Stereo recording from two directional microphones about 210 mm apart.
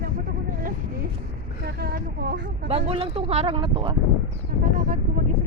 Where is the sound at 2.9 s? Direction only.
30° right (ahead or behind).